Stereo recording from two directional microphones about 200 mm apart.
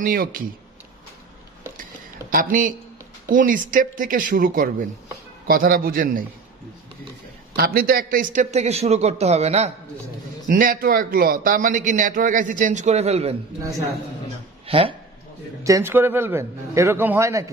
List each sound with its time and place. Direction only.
0.0 s speech: 45° right (ahead or behind)
2.3 s speech: 40° right (ahead or behind)
7.5 s a man's voice: 50° right (ahead or behind); by 9.7 s 30° right (ahead or behind)
10.5 s a man's voice: 45° right (ahead or behind)
13.6 s a man's voice: 15° right (ahead or behind)
14.7 s speech: 25° right (ahead or behind)
15.6 s a man's voice: 15° right (ahead or behind)